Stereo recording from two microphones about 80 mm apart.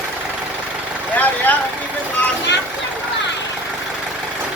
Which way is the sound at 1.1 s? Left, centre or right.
Centre.